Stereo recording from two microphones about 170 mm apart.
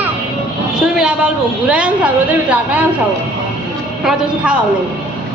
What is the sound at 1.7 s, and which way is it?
A woman's voice, 10° right (ahead or behind).